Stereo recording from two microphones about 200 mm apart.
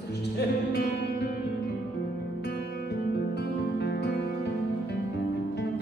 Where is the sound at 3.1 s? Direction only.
55° left (ahead or behind).